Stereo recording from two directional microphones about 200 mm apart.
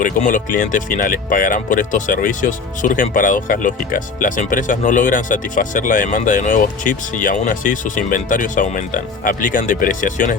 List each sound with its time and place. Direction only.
0.0 s speech: 40° left (ahead or behind)